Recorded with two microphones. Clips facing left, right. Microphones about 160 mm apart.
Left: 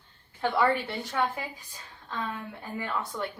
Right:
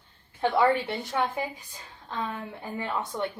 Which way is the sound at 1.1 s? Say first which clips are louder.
Right 1 dB; 20° right (ahead or behind).